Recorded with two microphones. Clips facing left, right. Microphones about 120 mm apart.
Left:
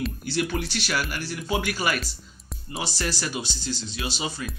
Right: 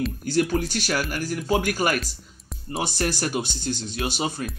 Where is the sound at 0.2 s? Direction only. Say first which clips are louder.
Right 7 dB; 45° right (ahead or behind).